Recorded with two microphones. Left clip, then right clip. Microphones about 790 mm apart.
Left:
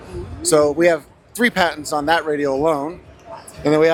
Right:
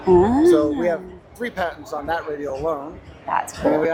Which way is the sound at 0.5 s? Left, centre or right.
Left.